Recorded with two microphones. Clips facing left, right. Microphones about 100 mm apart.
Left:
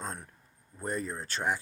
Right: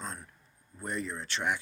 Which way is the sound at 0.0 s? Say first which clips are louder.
Left 2 dB; 50° left (ahead or behind).